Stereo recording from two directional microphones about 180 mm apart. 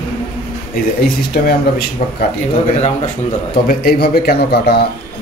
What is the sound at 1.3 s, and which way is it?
Speech, 60° left (ahead or behind).